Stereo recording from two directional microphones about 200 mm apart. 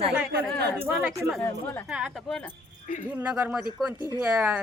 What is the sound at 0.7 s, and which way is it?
Speech, 10° right (ahead or behind).